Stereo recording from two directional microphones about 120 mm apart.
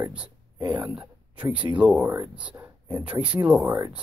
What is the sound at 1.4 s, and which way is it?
Speech, 10° right (ahead or behind).